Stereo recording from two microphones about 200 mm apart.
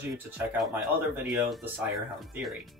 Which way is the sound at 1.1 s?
5° right (ahead or behind).